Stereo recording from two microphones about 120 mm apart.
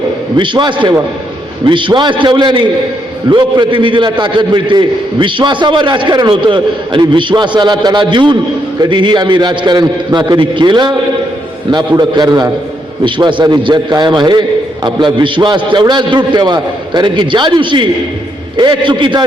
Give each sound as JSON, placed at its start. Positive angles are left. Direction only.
{"t": 0.3, "sound": "a man's voice", "side_deg": -40}